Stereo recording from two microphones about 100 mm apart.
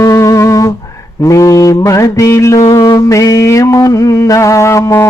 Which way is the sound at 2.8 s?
40° left (ahead or behind).